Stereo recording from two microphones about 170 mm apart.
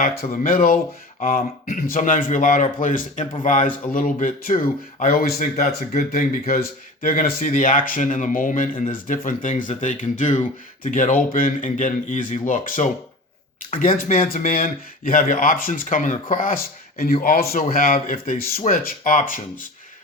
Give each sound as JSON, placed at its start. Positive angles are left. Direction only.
{"t": 0.2, "sound": "speech", "side_deg": 55}
{"t": 5.4, "sound": "speech", "side_deg": 45}
{"t": 6.1, "sound": "speech", "side_deg": 65}